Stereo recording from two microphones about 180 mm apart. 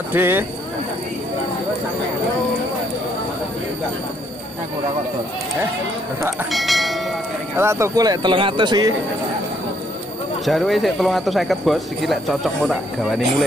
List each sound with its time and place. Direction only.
0.1 s speech: 10° right (ahead or behind)
6.5 s speech: centre (ahead or behind)
7.5 s speech: 15° right (ahead or behind)
10.4 s speech: centre (ahead or behind)